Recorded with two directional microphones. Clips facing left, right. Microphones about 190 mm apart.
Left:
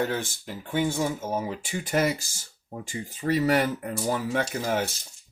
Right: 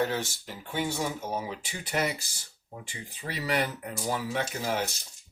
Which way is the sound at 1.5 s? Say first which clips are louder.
Left 6 dB; 50° left (ahead or behind).